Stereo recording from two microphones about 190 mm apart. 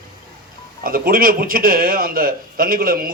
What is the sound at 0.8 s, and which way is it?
A man's voice, 50° right (ahead or behind).